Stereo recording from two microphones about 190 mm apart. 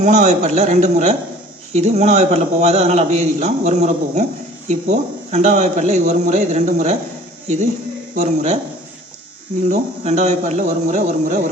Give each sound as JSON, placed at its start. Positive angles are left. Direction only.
{"t": 0.0, "sound": "a man's voice", "side_deg": -40}
{"t": 8.1, "sound": "a man's voice", "side_deg": -40}
{"t": 9.6, "sound": "a man's voice", "side_deg": -40}